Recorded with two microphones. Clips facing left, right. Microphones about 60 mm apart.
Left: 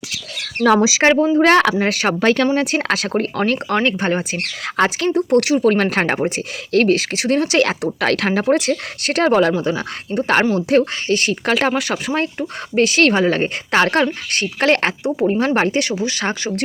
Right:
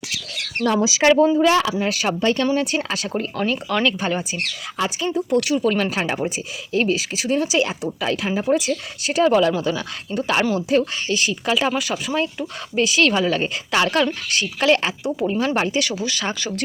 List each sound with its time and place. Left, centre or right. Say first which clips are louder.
0.6 s speech: left 6 dB; left
1.4 s speech: left 4 dB; left
3.1 s speech: left 2 dB; left
3.8 s speech: left 2 dB; left
4.8 s speech: left 6 dB; left
6.2 s speech: left 4 dB; left
8.0 s speech: left 5 dB; left
9.5 s speech: left 3 dB; left
10.2 s speech: left 4 dB; left
13.1 s speech: left 4 dB; left
15.3 s speech: left 4 dB; left